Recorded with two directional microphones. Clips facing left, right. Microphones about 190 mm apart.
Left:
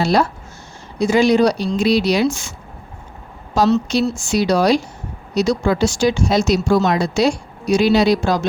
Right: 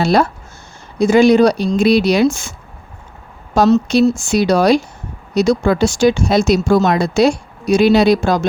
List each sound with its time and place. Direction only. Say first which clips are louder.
0.0 s speech: right 3 dB; 55° right (ahead or behind)
3.5 s speech: right 4 dB; 50° right (ahead or behind)